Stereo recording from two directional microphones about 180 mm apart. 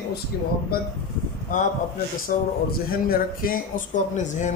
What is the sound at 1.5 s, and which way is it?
Speech, 45° left (ahead or behind).